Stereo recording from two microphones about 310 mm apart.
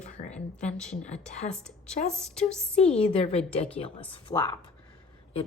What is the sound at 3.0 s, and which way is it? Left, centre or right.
Speech, centre.